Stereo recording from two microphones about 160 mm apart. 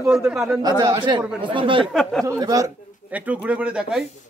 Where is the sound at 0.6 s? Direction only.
25° right (ahead or behind).